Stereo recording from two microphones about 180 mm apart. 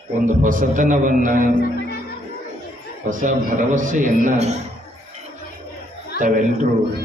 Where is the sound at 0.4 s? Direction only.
45° right (ahead or behind).